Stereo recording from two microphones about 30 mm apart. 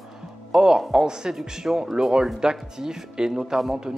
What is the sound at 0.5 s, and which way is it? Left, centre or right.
Speech, right.